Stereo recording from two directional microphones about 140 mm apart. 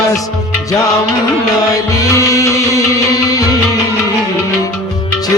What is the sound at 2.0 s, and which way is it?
Music, 25° left (ahead or behind).